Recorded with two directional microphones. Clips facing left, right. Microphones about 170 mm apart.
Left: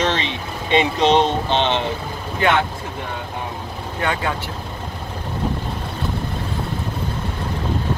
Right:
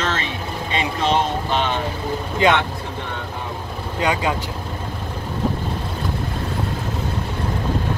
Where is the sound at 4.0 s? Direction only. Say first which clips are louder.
Right 2 dB; 15° right (ahead or behind).